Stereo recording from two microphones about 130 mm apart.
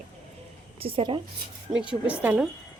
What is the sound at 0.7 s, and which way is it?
Speech, 45° right (ahead or behind).